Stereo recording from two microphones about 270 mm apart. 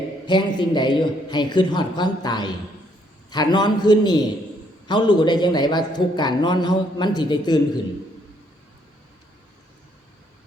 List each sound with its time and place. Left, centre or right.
0.3 s a man's voice: centre